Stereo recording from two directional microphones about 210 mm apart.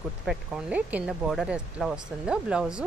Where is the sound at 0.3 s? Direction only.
5° right (ahead or behind).